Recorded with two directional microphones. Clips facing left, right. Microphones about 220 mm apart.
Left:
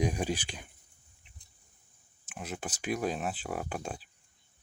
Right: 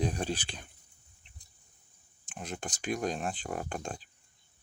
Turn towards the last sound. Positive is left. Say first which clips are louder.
# even
turn(degrees=5)  # may be behind; listen again after turning